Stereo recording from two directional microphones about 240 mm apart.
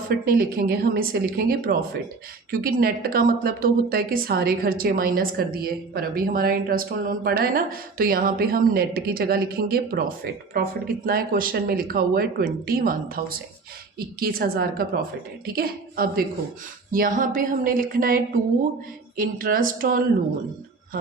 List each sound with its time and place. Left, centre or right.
0.3 s speech: right